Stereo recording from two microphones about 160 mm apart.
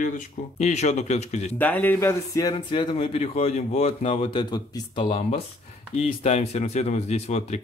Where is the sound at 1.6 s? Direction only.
10° left (ahead or behind); by 5.2 s 30° left (ahead or behind).